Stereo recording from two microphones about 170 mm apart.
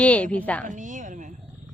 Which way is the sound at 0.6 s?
50° right (ahead or behind).